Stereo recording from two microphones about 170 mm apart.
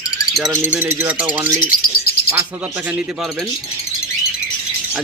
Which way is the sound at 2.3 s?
10° right (ahead or behind).